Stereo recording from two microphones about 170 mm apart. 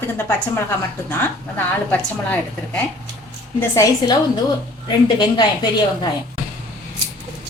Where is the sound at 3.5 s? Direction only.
15° left (ahead or behind).